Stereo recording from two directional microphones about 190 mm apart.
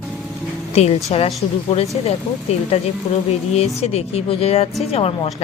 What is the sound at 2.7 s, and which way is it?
Speech, 35° left (ahead or behind).